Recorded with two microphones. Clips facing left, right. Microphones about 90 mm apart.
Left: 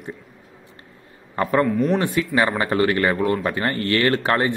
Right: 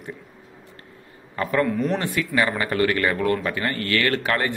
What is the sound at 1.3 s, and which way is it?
A man's voice, 30° left (ahead or behind).